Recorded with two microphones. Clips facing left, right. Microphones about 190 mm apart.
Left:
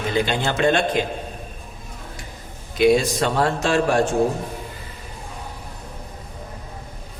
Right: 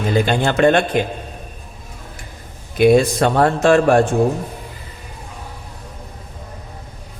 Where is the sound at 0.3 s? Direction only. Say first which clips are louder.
Right 8 dB; 55° right (ahead or behind).